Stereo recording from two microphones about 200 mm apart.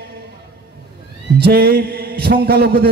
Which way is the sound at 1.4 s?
50° right (ahead or behind).